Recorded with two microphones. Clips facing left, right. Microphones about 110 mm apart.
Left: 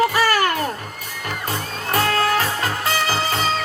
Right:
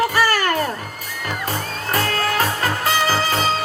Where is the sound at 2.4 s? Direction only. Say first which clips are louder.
Right 2 dB; 40° right (ahead or behind).